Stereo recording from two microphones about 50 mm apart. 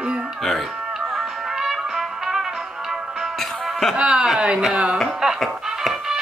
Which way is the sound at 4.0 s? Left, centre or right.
Right.